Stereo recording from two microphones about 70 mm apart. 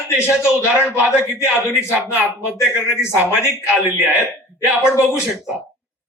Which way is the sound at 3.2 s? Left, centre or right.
Left.